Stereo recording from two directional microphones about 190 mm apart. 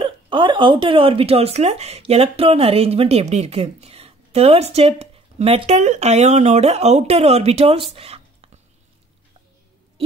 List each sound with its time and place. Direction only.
0.0 s speech: 25° right (ahead or behind)